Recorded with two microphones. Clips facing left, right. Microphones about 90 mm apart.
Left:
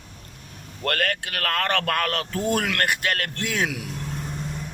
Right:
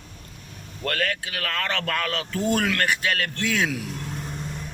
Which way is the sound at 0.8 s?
55° left (ahead or behind).